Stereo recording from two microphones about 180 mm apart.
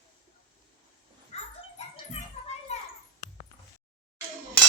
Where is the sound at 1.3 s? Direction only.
35° left (ahead or behind).